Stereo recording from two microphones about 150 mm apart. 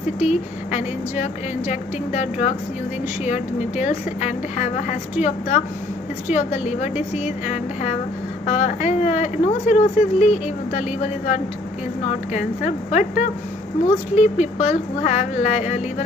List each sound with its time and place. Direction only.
0.2 s speech: 50° left (ahead or behind)
3.8 s speech: 50° left (ahead or behind)